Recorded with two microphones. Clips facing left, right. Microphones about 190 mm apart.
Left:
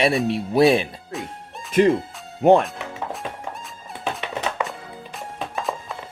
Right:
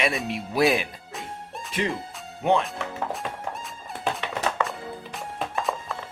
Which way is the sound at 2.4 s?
45° left (ahead or behind).